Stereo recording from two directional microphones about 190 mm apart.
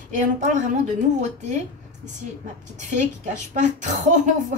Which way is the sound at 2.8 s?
40° right (ahead or behind).